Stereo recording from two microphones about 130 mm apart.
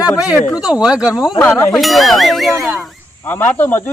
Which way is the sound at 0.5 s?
5° right (ahead or behind).